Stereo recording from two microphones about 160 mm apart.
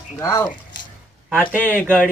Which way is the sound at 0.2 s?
15° left (ahead or behind).